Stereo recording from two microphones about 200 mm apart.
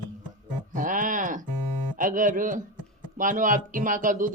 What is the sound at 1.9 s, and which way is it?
Speech, 40° right (ahead or behind).